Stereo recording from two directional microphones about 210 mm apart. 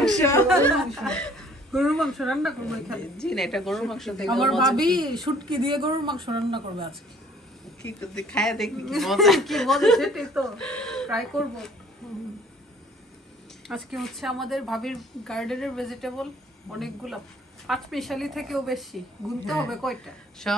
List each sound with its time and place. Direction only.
0.2 s speech: 15° left (ahead or behind)
4.7 s a woman's voice: 20° right (ahead or behind)
8.1 s speech: 5° left (ahead or behind)
12.0 s a sound: centre (ahead or behind)
13.7 s speech: centre (ahead or behind)